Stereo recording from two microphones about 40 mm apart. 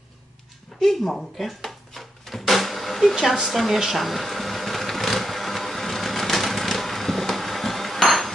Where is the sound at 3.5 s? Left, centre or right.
Centre.